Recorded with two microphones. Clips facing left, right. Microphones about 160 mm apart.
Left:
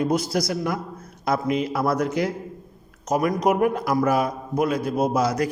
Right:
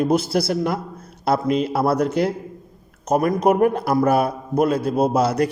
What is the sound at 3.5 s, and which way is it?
A man's voice, 30° right (ahead or behind).